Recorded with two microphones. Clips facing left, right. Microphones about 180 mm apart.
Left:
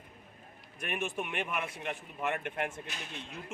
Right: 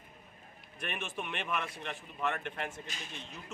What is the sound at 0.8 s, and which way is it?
Speech, 10° left (ahead or behind).